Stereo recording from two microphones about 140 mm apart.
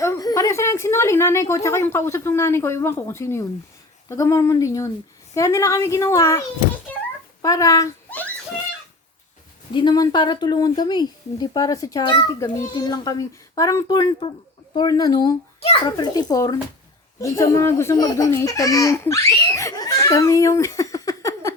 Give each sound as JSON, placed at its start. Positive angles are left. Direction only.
{"t": 0.0, "sound": "a woman's voice", "side_deg": 25}
{"t": 7.4, "sound": "a child's voice", "side_deg": 25}
{"t": 9.7, "sound": "a child's voice", "side_deg": 30}